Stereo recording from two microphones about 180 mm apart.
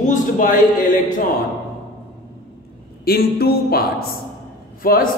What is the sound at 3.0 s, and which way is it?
A woman's voice, 60° left (ahead or behind).